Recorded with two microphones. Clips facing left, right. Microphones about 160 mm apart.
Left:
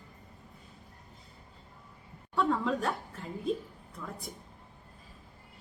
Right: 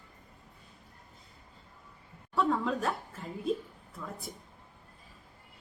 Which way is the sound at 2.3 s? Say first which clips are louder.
Even; centre (ahead or behind).